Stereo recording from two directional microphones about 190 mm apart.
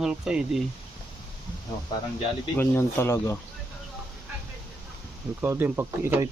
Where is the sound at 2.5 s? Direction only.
10° left (ahead or behind).